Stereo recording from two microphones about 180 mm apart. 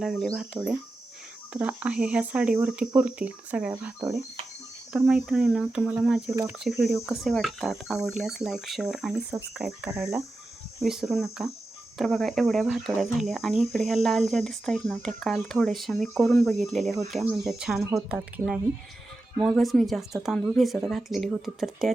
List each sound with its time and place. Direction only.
0.0 s speech: centre (ahead or behind)